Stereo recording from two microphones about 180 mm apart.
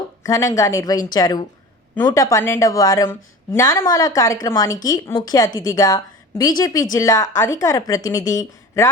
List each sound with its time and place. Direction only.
0.2 s a woman's voice: 20° left (ahead or behind)